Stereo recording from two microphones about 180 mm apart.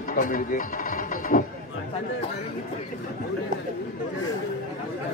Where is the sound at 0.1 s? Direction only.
50° left (ahead or behind).